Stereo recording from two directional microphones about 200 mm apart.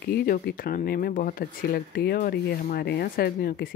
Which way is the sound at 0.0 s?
50° left (ahead or behind).